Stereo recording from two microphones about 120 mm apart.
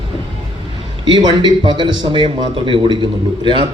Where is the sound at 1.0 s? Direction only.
40° right (ahead or behind).